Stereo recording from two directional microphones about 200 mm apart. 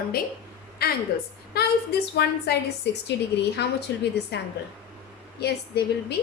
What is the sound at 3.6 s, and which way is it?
A woman's voice, 55° left (ahead or behind).